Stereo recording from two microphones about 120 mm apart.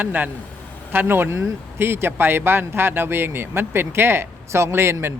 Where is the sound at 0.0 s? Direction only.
15° right (ahead or behind).